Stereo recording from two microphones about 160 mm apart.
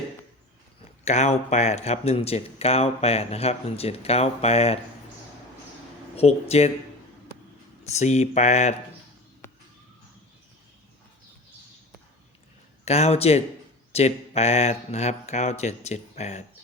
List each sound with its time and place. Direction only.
1.0 s speech: 45° left (ahead or behind)
6.1 s speech: 40° left (ahead or behind)
7.9 s speech: 45° left (ahead or behind)
9.4 s a sound: 15° left (ahead or behind)
12.8 s a man's voice: 40° left (ahead or behind)